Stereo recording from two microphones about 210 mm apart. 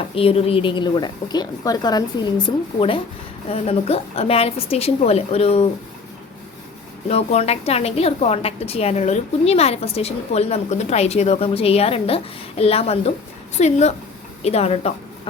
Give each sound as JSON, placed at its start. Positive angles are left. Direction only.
{"t": 0.1, "sound": "a woman's voice", "side_deg": 25}
{"t": 3.5, "sound": "a woman's voice", "side_deg": 30}
{"t": 7.1, "sound": "a woman's voice", "side_deg": 30}